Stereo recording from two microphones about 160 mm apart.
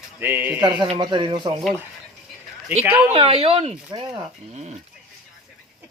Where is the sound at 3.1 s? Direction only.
35° right (ahead or behind).